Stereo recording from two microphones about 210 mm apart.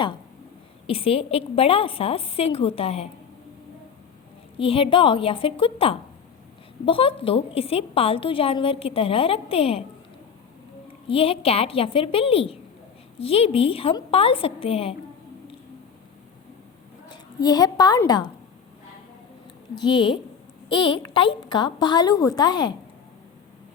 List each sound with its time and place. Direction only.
0.9 s a woman's voice: 25° left (ahead or behind)
4.5 s a woman's voice: 25° left (ahead or behind)
11.1 s a woman's voice: 25° left (ahead or behind)
17.4 s a woman's voice: 20° left (ahead or behind)
19.8 s a woman's voice: 25° left (ahead or behind)